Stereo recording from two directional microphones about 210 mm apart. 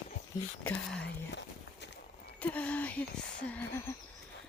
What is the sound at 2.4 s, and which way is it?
A woman's voice, 5° left (ahead or behind).